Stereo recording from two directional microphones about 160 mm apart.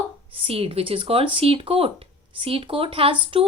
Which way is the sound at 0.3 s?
35° right (ahead or behind).